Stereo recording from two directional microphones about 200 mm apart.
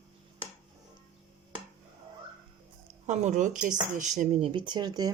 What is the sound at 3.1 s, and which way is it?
A woman's voice, 35° right (ahead or behind).